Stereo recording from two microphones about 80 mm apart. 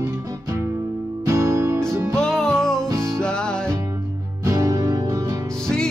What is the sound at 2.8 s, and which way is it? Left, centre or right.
Music, right.